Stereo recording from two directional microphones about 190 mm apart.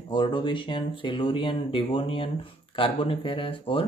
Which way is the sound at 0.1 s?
25° left (ahead or behind).